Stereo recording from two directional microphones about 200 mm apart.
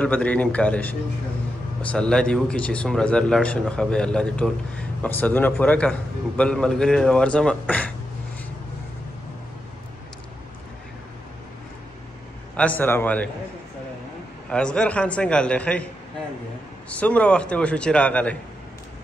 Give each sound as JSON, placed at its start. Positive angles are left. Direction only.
{"t": 0.0, "sound": "a man's voice", "side_deg": 5}
{"t": 12.5, "sound": "a man's voice", "side_deg": 10}
{"t": 14.5, "sound": "speech", "side_deg": 5}
{"t": 16.9, "sound": "a man's voice", "side_deg": 5}